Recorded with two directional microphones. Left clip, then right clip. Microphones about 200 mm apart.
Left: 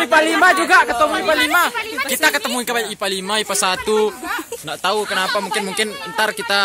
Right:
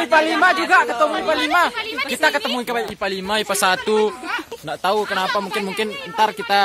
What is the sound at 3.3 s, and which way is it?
Speech, 20° right (ahead or behind).